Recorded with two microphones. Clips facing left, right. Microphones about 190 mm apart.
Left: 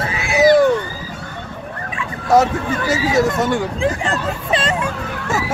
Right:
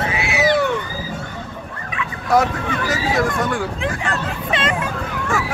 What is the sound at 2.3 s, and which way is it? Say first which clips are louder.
Speech: left 3 dB; 25° left (ahead or behind).